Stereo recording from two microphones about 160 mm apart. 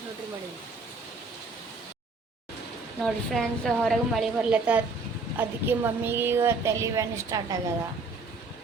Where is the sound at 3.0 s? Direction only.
5° left (ahead or behind); by 7.4 s 20° right (ahead or behind).